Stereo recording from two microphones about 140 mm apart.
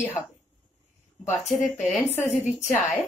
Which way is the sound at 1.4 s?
60° left (ahead or behind).